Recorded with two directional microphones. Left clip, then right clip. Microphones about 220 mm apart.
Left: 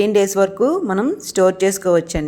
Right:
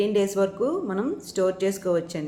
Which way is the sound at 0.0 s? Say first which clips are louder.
Left 8 dB; 40° left (ahead or behind).